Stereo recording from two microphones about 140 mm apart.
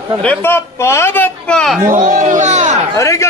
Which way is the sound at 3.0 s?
20° left (ahead or behind).